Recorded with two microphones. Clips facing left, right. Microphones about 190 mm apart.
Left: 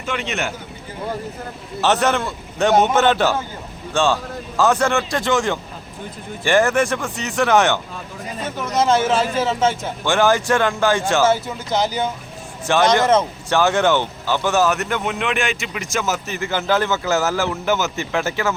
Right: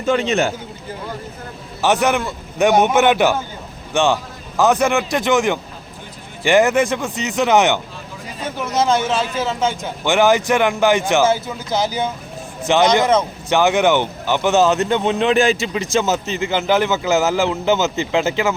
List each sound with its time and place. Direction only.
0.0 s speech: 35° right (ahead or behind)
1.8 s speech: 15° right (ahead or behind)
8.6 s speech: centre (ahead or behind)
10.0 s speech: 20° right (ahead or behind)
12.6 s speech: 20° right (ahead or behind)